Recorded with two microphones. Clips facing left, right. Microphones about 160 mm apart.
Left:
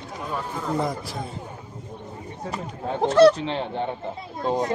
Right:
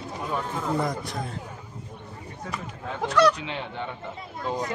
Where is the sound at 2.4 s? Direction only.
35° left (ahead or behind).